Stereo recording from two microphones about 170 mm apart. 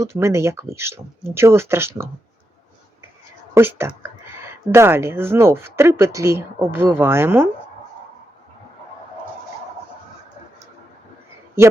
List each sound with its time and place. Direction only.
0.0 s speech: 15° right (ahead or behind)
3.5 s speech: 15° right (ahead or behind)